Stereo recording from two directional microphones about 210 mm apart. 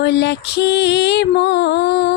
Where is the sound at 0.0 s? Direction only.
55° left (ahead or behind).